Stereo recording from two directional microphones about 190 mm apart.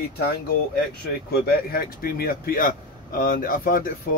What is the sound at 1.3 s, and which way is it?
Speech, 50° left (ahead or behind).